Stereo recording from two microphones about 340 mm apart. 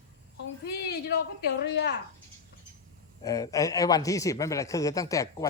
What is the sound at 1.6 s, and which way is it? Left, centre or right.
Speech, left.